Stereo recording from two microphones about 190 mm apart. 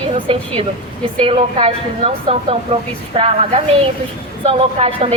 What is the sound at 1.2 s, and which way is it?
A woman's voice, 30° right (ahead or behind).